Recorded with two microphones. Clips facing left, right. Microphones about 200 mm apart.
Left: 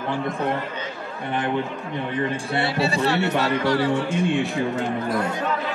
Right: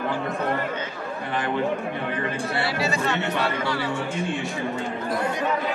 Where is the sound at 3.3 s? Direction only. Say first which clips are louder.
Left 4 dB; 40° left (ahead or behind).